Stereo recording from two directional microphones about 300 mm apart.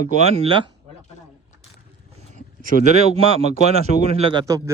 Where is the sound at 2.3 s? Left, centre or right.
Right.